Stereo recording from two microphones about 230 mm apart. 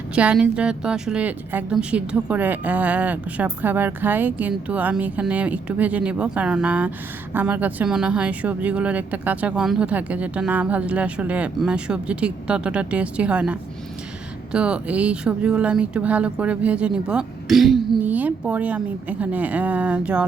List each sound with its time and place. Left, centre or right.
0.1 s a woman's voice: centre